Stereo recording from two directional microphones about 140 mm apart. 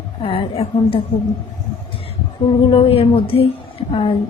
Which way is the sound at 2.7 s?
40° left (ahead or behind).